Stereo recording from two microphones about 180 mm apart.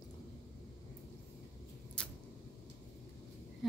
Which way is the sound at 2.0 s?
5° left (ahead or behind).